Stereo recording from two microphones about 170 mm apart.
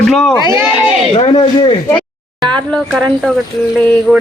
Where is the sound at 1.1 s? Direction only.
30° left (ahead or behind).